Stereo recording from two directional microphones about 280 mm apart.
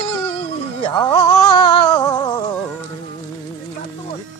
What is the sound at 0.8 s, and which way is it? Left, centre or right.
Music, centre.